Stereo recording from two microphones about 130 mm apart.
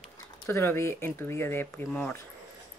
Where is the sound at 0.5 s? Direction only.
20° left (ahead or behind).